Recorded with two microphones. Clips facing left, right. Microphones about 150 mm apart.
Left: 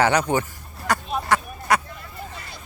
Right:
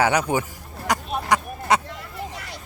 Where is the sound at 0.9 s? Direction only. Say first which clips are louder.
Even; 15° right (ahead or behind).